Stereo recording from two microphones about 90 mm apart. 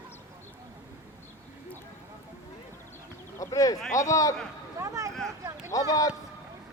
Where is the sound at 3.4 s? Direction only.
40° left (ahead or behind).